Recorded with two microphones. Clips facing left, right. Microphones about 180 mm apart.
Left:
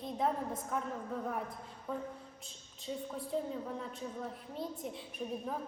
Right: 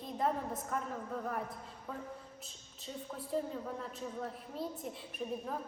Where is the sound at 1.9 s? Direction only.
Centre (ahead or behind).